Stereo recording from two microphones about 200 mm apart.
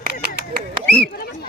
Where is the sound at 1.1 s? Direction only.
50° left (ahead or behind).